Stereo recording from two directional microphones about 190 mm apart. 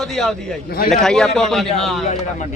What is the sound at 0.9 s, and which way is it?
Speech, 5° left (ahead or behind).